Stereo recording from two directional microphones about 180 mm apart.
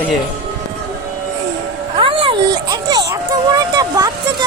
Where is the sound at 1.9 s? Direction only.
30° right (ahead or behind).